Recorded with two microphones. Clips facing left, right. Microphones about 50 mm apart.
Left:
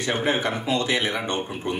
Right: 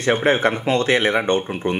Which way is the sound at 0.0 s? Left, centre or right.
Right.